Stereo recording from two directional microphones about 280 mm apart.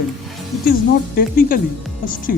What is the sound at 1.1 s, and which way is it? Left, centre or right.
Speech, left.